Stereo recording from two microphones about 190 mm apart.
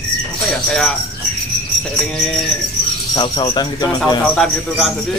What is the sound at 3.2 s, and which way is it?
Speech, 25° left (ahead or behind).